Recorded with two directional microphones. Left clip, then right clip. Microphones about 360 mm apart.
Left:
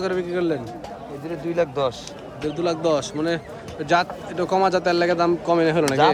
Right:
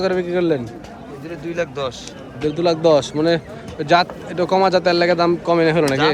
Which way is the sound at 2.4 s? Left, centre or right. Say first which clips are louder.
Right 6 dB; centre.